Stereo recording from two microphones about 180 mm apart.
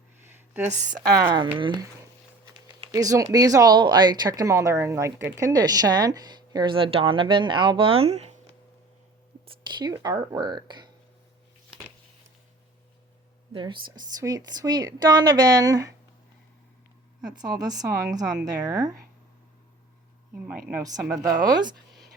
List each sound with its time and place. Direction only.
0.7 s a woman's voice: 45° right (ahead or behind)
1.0 s speech: 60° right (ahead or behind)
1.5 s speech: 25° right (ahead or behind)
9.6 s a sound: 25° right (ahead or behind)
9.9 s speech: 20° right (ahead or behind)
13.5 s speech: 30° right (ahead or behind)
17.2 s speech: 20° right (ahead or behind)
20.7 s speech: 15° right (ahead or behind)